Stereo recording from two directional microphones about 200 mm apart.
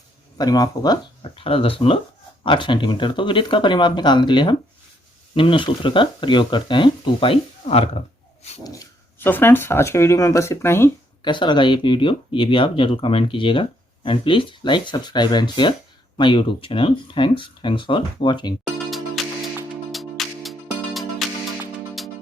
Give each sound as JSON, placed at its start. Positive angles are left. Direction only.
{"t": 0.3, "sound": "speech", "side_deg": 20}
{"t": 8.6, "sound": "speech", "side_deg": 15}
{"t": 11.2, "sound": "speech", "side_deg": 25}
{"t": 18.9, "sound": "music", "side_deg": 0}